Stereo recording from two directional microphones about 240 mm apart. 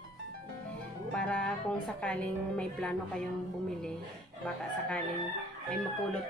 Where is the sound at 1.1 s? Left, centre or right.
Centre.